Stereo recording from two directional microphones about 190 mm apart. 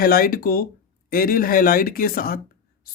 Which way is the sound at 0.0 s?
50° left (ahead or behind).